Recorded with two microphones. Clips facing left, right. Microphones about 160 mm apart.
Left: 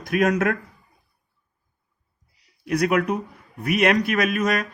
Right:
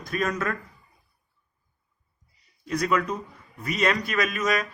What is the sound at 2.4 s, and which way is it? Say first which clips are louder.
Speech: left 5 dB; 70° left (ahead or behind).